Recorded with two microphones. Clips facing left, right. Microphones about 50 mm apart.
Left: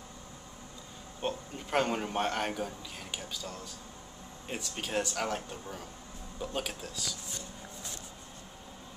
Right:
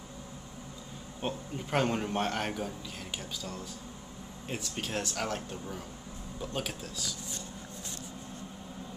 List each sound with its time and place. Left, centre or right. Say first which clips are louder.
1.2 s a man's voice: even; centre